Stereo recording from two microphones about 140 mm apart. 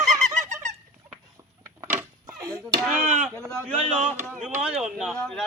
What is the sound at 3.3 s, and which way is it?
Speech, 20° right (ahead or behind).